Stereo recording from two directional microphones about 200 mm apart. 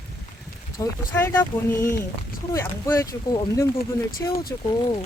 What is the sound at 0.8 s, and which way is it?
Speech, 15° left (ahead or behind).